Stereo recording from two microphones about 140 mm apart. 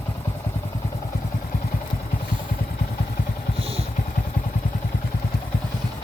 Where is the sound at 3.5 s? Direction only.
45° right (ahead or behind).